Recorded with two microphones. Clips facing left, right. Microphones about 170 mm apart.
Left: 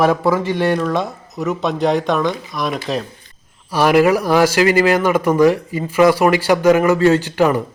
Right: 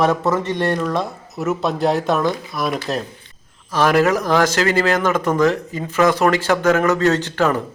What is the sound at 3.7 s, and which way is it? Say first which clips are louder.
A man's voice: left 3 dB; 10° left (ahead or behind).